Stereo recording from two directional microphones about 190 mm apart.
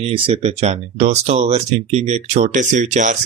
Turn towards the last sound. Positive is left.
turn(degrees=-40)  # may be behind; listen again after turning